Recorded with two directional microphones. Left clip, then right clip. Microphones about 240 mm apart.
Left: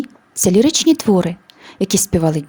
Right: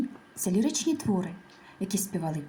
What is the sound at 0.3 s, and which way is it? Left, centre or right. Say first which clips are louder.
Speech: left 16 dB; left.